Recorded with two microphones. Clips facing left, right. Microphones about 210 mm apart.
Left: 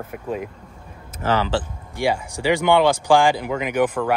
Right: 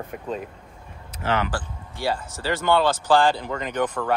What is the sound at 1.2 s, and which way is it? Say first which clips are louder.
Speech: left 3 dB; 35° left (ahead or behind).